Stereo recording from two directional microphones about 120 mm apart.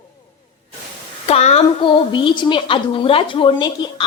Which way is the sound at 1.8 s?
45° left (ahead or behind).